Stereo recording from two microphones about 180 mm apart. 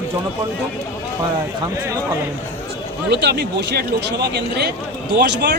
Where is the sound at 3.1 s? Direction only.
70° right (ahead or behind).